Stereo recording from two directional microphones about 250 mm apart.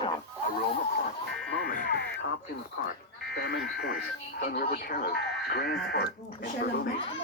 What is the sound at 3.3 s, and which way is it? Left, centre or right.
A child's voice, left.